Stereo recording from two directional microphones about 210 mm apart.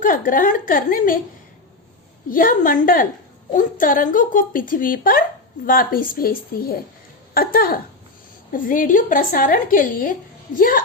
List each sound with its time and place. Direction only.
0.0 s a woman's voice: 40° left (ahead or behind)
2.3 s a woman's voice: 40° left (ahead or behind)